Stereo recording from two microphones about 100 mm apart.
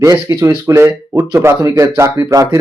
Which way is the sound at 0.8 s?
25° right (ahead or behind).